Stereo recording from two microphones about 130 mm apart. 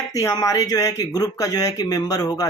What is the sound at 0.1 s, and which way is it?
Speech, 25° left (ahead or behind).